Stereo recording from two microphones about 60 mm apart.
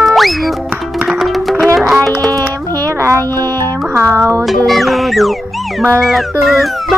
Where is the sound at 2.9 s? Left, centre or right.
Right.